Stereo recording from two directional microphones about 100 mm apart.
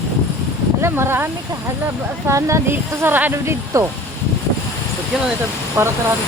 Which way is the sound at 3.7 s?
30° right (ahead or behind).